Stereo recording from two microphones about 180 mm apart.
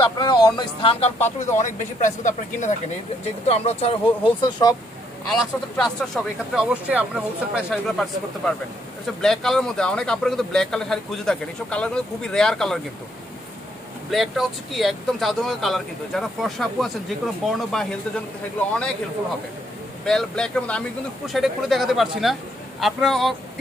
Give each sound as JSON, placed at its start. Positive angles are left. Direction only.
{"t": 0.0, "sound": "speech", "side_deg": 25}
{"t": 1.6, "sound": "speech", "side_deg": 45}
{"t": 4.4, "sound": "speech", "side_deg": 20}
{"t": 5.3, "sound": "speech", "side_deg": 0}
{"t": 14.1, "sound": "speech", "side_deg": 0}
{"t": 20.1, "sound": "speech", "side_deg": 5}